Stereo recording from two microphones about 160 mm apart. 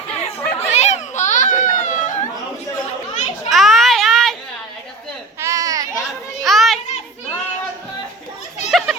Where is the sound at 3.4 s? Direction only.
Centre (ahead or behind).